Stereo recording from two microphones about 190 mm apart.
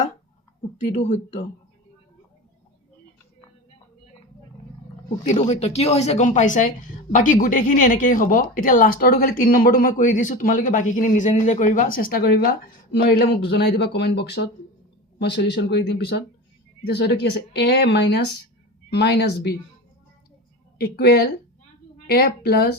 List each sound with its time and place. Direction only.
0.9 s speech: 35° left (ahead or behind)
5.3 s speech: 35° left (ahead or behind); by 19.5 s 60° left (ahead or behind)
20.7 s speech: 55° left (ahead or behind)